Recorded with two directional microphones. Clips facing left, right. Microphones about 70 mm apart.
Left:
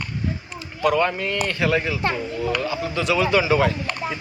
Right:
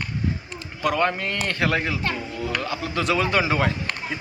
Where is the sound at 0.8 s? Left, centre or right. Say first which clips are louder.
Left 2 dB; right.